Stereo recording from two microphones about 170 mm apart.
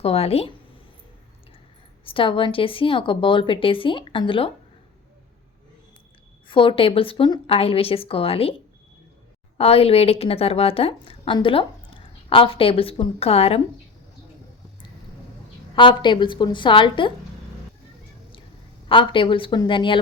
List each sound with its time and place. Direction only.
0.0 s a woman's voice: 35° left (ahead or behind)
2.0 s a woman's voice: 30° left (ahead or behind)
6.5 s a woman's voice: 30° left (ahead or behind)
9.6 s a woman's voice: 35° left (ahead or behind)
15.7 s a woman's voice: 30° left (ahead or behind)
18.9 s a woman's voice: 30° left (ahead or behind)